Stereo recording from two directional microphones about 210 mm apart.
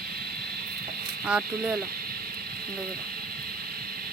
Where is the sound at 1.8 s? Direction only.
45° right (ahead or behind).